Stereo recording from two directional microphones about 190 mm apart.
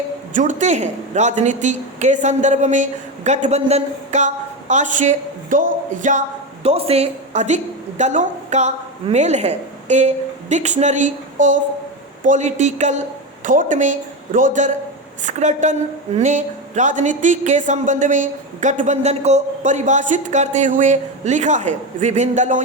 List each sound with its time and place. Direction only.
0.3 s a woman's voice: 40° right (ahead or behind)